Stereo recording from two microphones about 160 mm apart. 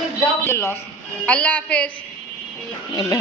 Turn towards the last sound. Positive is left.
turn(degrees=25)  # may be behind; listen again after turning